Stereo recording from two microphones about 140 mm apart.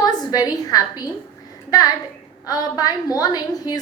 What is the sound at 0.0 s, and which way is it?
A woman's voice, 25° left (ahead or behind).